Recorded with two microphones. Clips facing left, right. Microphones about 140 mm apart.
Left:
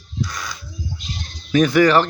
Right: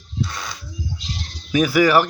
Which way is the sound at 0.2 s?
25° right (ahead or behind).